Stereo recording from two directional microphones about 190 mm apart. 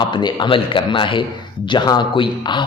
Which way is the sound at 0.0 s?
25° left (ahead or behind).